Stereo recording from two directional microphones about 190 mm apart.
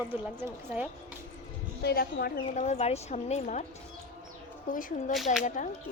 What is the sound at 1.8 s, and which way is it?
Speech, 55° left (ahead or behind).